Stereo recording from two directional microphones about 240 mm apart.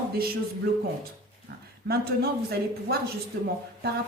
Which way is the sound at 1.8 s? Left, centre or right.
Right.